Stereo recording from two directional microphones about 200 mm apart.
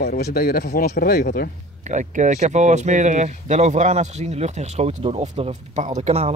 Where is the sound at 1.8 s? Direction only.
35° right (ahead or behind).